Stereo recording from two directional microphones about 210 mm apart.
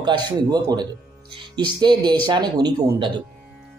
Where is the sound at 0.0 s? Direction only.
20° right (ahead or behind).